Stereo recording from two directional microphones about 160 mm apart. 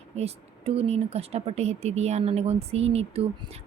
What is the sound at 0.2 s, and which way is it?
Speech, 40° right (ahead or behind).